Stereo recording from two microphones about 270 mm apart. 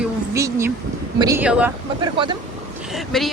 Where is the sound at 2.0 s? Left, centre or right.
Centre.